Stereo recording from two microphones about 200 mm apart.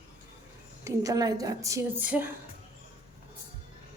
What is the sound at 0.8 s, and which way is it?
A woman's voice, 15° right (ahead or behind).